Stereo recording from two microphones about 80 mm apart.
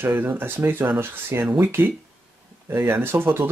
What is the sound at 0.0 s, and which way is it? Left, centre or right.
Speech, right.